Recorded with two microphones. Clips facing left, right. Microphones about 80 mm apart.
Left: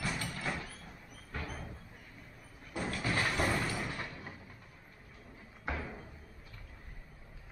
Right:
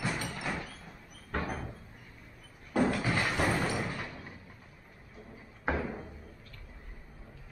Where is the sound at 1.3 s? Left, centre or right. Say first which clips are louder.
Right 8 dB; right.